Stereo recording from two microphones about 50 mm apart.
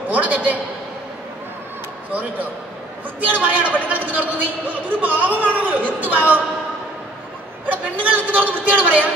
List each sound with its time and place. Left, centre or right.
0.1 s a man's voice: right
3.3 s a man's voice: right
7.6 s a man's voice: right